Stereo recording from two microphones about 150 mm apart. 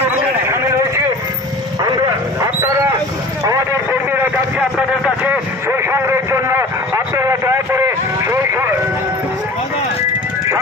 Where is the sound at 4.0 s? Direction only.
15° right (ahead or behind).